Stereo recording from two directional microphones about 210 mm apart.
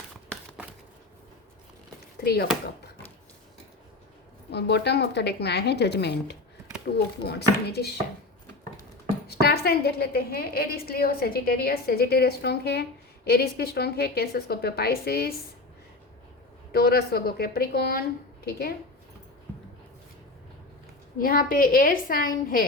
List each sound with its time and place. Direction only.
2.2 s a woman's voice: 50° left (ahead or behind)
4.5 s a woman's voice: 50° left (ahead or behind)
9.2 s a woman's voice: 50° left (ahead or behind)
16.7 s a woman's voice: 50° left (ahead or behind)
21.2 s a woman's voice: 40° left (ahead or behind)